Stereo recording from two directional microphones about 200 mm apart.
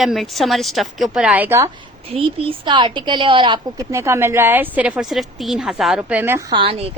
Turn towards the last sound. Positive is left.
turn(degrees=-30)  # may be behind; listen again after turning